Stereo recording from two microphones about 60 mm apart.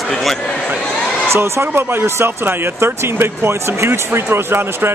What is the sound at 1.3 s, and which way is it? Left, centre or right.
Speech, right.